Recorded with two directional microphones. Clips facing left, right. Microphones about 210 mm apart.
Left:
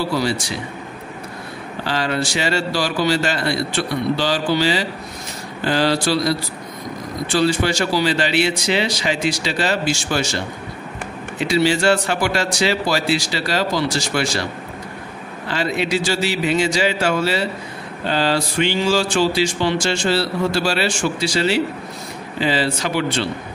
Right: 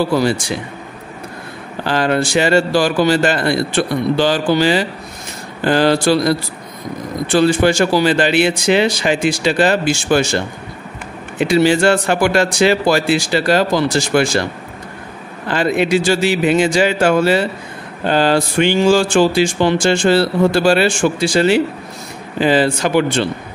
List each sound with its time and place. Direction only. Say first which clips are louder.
0.1 s speech: right 5 dB; 50° right (ahead or behind)
1.9 s speech: right 6 dB; 55° right (ahead or behind)